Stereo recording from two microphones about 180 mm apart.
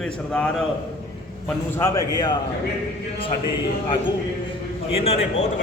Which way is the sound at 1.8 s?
20° left (ahead or behind).